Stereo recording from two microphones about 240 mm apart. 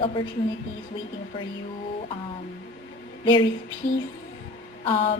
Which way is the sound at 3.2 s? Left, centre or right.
Centre.